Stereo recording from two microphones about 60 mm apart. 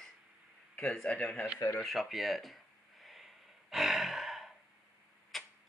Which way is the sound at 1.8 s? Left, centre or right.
Centre.